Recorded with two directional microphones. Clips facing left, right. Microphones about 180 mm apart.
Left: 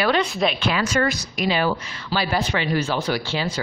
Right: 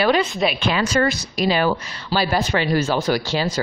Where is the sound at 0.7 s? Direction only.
30° right (ahead or behind).